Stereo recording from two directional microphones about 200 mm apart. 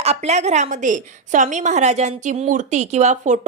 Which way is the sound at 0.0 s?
30° right (ahead or behind).